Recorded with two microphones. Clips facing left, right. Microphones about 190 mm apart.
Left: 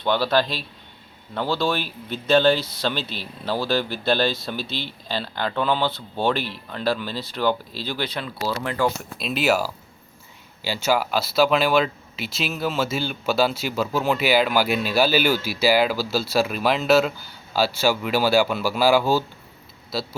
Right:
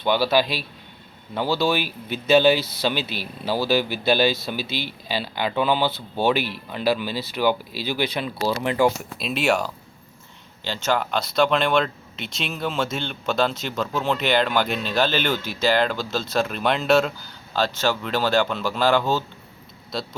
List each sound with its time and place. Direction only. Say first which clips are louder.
0.0 s speech: right 1 dB; 10° right (ahead or behind)
9.1 s speech: left 1 dB; centre (ahead or behind)